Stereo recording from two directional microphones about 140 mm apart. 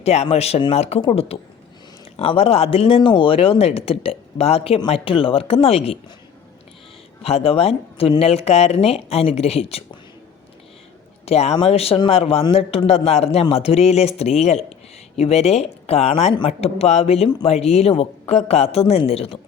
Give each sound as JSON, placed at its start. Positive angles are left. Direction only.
{"t": 0.0, "sound": "speech", "side_deg": 50}
{"t": 7.2, "sound": "speech", "side_deg": 45}
{"t": 11.3, "sound": "speech", "side_deg": 50}